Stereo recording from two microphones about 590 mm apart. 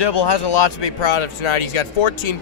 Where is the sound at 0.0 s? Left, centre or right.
Left.